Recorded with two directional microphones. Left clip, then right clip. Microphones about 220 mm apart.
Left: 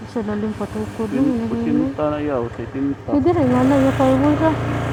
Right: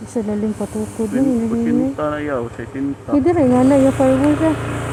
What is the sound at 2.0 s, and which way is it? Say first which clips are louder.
Speech: even; 15° right (ahead or behind).